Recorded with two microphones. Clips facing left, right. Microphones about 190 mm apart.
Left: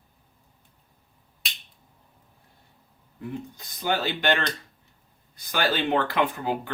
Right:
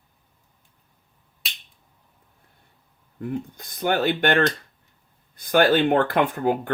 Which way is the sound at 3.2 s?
55° right (ahead or behind).